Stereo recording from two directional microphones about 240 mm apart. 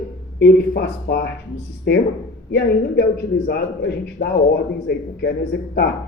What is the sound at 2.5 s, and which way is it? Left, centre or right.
A man's voice, left.